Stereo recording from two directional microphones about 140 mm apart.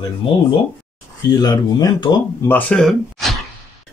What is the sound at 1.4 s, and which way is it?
Speech, 30° left (ahead or behind).